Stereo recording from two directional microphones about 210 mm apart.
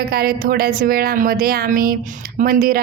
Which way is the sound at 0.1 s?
45° right (ahead or behind).